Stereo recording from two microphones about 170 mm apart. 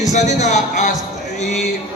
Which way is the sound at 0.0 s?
45° left (ahead or behind).